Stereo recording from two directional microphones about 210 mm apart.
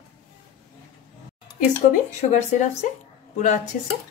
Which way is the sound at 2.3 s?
35° left (ahead or behind).